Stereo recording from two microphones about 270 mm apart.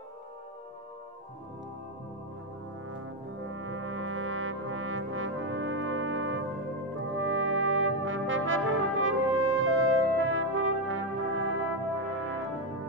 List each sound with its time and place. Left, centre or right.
3.4 s brass instrument: right